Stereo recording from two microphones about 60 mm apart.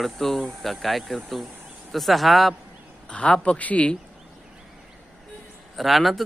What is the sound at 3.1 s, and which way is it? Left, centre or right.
Speech, centre.